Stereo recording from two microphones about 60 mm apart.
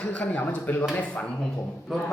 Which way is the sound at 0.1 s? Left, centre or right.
Left.